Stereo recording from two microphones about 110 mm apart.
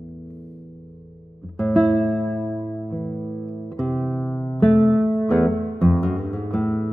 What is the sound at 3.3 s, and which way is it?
Music, 10° left (ahead or behind).